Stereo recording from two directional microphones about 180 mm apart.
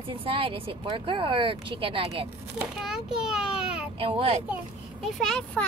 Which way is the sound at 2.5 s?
5° right (ahead or behind).